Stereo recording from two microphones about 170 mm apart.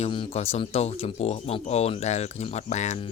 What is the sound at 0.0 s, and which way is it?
Speech, 35° left (ahead or behind).